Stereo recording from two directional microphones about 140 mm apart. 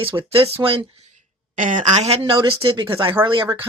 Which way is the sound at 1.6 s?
65° right (ahead or behind).